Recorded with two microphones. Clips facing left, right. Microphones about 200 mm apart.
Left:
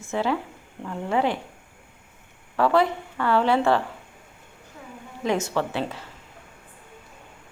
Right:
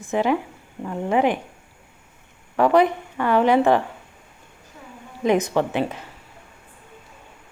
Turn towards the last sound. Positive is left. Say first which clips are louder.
# right 4 dB
turn(degrees=-15)  # may be behind; listen again after turning